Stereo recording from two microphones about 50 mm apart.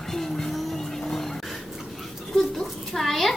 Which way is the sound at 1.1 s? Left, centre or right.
Centre.